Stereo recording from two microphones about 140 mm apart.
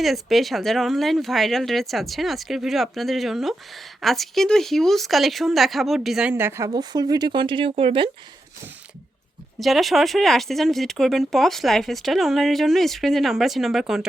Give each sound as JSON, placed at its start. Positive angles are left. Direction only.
{"t": 0.0, "sound": "speech", "side_deg": 0}
{"t": 6.3, "sound": "a woman's voice", "side_deg": -15}
{"t": 6.7, "sound": "speech", "side_deg": -30}
{"t": 9.6, "sound": "speech", "side_deg": 0}